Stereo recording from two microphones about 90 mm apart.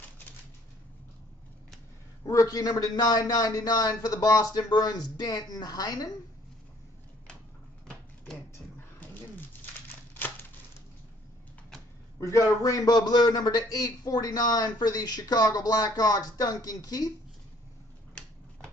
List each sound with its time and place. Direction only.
2.2 s a man's voice: 40° left (ahead or behind)
9.8 s a sound: 25° left (ahead or behind)
12.2 s a man's voice: 35° left (ahead or behind)